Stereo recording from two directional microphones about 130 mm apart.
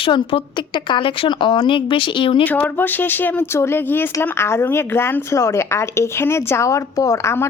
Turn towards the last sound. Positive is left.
turn(degrees=20)  # may be behind; listen again after turning